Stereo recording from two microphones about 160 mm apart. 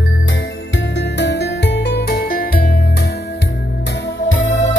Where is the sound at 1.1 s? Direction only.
90° left; by 2.7 s 65° left (ahead or behind).